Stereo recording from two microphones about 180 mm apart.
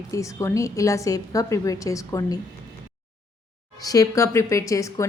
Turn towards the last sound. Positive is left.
turn(degrees=15)  # may be behind; listen again after turning